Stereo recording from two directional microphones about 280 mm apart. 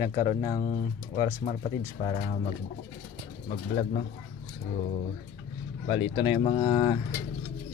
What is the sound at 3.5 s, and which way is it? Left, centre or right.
Speech, left.